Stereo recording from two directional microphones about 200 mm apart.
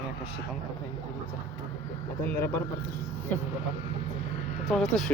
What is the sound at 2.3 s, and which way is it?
Speech, 10° left (ahead or behind).